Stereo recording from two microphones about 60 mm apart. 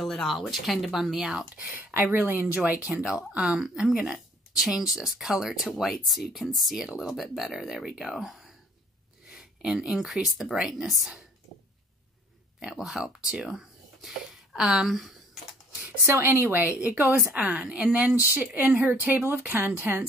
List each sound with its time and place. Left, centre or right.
0.0 s speech: centre
2.1 s a woman's voice: right
2.7 s speech: centre
12.6 s speech: centre
14.9 s a sound: centre
16.1 s a woman's voice: right
17.5 s speech: centre
18.1 s a woman's voice: right